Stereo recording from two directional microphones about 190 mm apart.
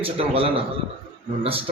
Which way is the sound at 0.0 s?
30° right (ahead or behind).